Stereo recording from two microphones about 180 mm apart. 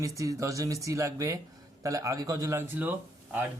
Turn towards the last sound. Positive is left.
turn(degrees=-10)  # may be behind; listen again after turning